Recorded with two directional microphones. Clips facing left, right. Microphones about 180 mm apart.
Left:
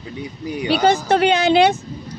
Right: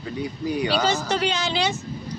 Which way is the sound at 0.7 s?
60° left (ahead or behind).